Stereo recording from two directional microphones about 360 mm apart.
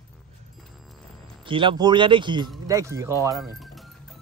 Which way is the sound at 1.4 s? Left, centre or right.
Centre.